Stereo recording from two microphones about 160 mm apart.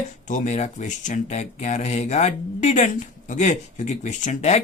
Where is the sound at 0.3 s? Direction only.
50° left (ahead or behind).